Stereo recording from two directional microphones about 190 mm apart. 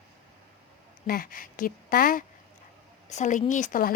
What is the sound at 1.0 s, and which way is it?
A woman's voice, 50° left (ahead or behind).